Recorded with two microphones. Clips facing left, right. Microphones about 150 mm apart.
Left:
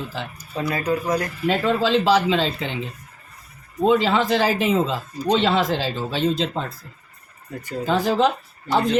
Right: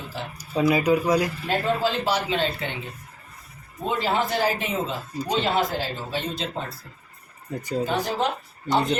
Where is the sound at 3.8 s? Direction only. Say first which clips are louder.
Left 7 dB; 90° left.